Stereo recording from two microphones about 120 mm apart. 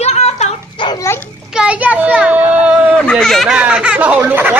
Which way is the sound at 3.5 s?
10° right (ahead or behind).